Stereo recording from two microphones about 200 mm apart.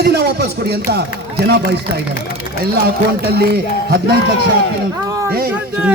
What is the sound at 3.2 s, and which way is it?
Speech, 55° right (ahead or behind).